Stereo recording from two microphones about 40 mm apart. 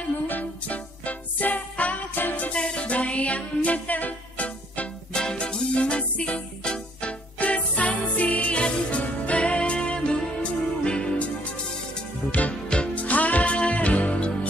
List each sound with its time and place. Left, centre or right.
0.3 s music: left
2.5 s music: left
5.1 s music: centre
12.3 s music: left